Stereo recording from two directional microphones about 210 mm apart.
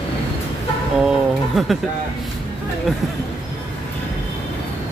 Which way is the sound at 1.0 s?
Centre (ahead or behind).